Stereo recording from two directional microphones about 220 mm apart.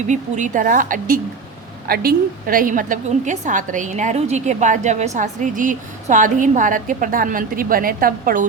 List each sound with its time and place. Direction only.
0.1 s a woman's voice: 35° right (ahead or behind)